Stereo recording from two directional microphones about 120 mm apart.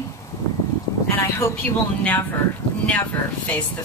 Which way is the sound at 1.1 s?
15° left (ahead or behind).